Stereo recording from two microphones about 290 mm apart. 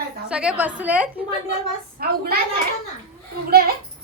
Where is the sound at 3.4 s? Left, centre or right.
Right.